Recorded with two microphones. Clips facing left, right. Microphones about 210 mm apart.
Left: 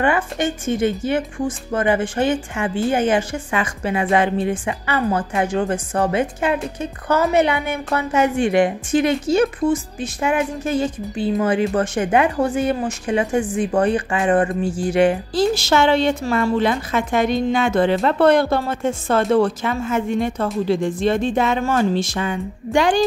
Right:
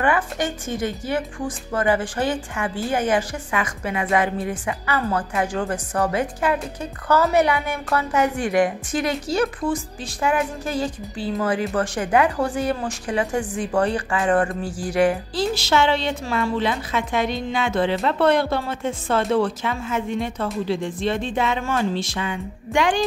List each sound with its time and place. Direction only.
0.0 s a woman's voice: 25° left (ahead or behind)
15.3 s a woman's voice: 45° left (ahead or behind)